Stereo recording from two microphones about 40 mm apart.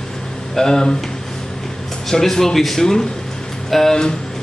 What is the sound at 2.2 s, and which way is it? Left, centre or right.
A man's voice, centre.